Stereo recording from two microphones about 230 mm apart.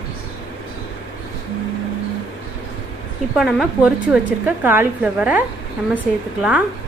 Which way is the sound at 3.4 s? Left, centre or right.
Centre.